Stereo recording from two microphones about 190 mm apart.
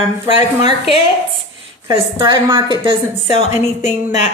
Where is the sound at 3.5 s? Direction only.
35° left (ahead or behind).